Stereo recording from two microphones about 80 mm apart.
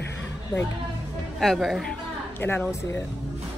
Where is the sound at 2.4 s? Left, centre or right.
Left.